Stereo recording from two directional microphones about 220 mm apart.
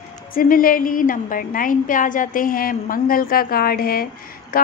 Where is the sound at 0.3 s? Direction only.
40° left (ahead or behind).